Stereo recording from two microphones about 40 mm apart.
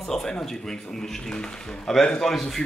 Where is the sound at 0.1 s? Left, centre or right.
Centre.